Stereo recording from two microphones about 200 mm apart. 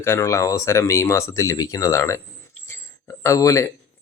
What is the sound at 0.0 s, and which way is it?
Speech, 15° left (ahead or behind).